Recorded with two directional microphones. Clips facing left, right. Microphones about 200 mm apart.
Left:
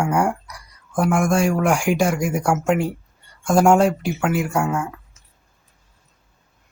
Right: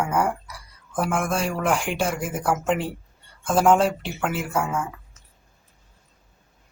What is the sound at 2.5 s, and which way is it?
Speech, 10° left (ahead or behind).